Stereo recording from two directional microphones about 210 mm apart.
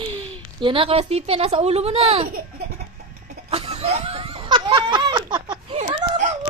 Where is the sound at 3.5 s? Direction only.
30° right (ahead or behind).